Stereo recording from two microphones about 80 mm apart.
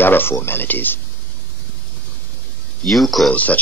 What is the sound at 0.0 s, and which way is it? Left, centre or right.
Speech, left.